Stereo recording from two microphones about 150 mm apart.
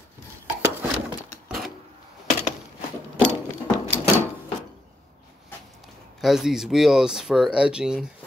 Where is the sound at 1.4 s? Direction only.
Centre (ahead or behind).